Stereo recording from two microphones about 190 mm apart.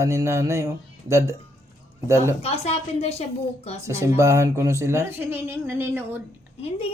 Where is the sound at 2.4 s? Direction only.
35° left (ahead or behind).